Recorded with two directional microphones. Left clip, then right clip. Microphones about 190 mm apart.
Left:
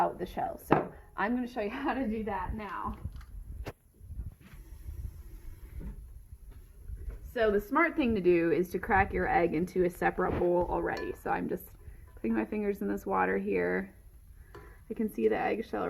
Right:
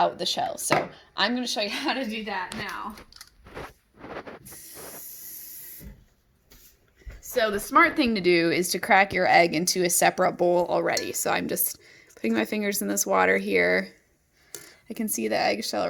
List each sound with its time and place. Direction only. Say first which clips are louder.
0.0 s speech: right 7 dB; 40° right (ahead or behind)
7.4 s speech: right 6 dB; 50° right (ahead or behind)
14.9 s speech: right 3 dB; 40° right (ahead or behind)